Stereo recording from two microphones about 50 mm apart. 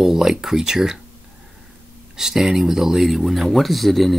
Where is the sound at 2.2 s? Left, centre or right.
Centre.